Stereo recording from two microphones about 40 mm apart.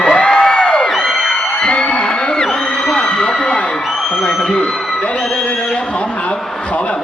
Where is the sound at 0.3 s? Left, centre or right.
Centre.